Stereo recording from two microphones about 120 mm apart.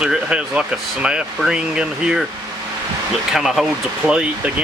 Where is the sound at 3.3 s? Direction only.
Centre (ahead or behind).